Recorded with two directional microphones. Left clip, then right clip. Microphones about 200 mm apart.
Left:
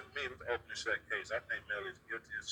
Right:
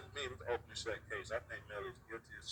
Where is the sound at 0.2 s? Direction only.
15° right (ahead or behind).